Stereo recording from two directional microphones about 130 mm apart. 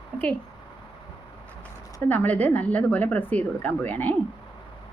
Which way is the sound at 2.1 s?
15° left (ahead or behind).